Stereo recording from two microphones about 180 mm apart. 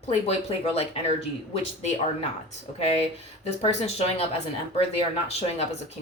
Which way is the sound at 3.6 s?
35° left (ahead or behind).